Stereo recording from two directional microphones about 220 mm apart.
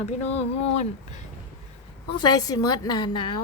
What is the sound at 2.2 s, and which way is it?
Speech, 20° left (ahead or behind).